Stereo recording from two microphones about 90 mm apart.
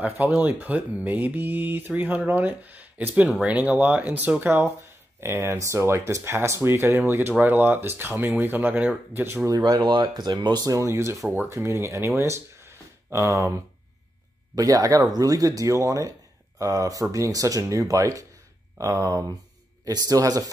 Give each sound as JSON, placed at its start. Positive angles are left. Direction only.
{"t": 0.0, "sound": "speech", "side_deg": -20}
{"t": 9.5, "sound": "speech", "side_deg": -45}
{"t": 9.8, "sound": "speech", "side_deg": -60}
{"t": 12.2, "sound": "a sound", "side_deg": -30}
{"t": 14.5, "sound": "speech", "side_deg": -40}